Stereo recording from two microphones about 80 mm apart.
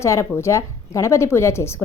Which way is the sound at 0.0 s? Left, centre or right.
Left.